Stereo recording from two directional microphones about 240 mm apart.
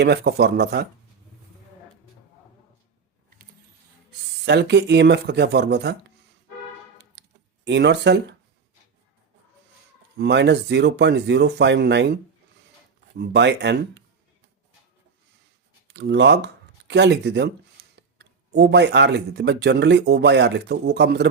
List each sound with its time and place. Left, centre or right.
0.0 s speech: right
4.4 s speech: right
7.0 s a sound: right
10.2 s speech: right
15.9 s speech: right